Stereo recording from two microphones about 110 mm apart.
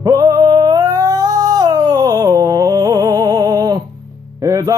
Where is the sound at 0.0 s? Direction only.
35° right (ahead or behind).